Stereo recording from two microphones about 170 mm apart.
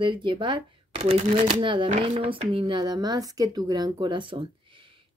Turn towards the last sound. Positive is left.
turn(degrees=-30)  # may be behind; listen again after turning